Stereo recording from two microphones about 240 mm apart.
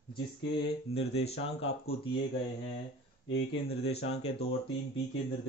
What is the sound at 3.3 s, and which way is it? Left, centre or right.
Speech, left.